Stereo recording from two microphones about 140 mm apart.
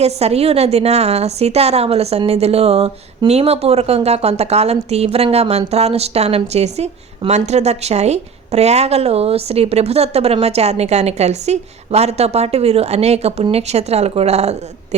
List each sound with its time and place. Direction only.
0.0 s a woman's voice: 50° right (ahead or behind)